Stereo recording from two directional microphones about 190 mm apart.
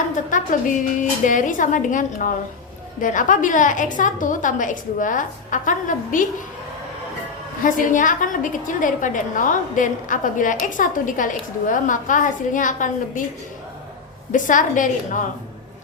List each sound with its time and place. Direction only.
0.3 s a woman's voice: 45° left (ahead or behind)
7.6 s a woman's voice: 45° left (ahead or behind)
14.3 s a woman's voice: 45° left (ahead or behind)